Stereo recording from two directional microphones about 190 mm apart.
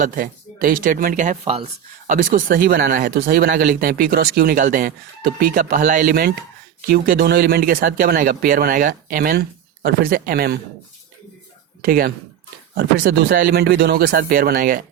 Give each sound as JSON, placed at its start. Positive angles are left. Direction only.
{"t": 0.0, "sound": "speech", "side_deg": -45}
{"t": 11.8, "sound": "speech", "side_deg": -50}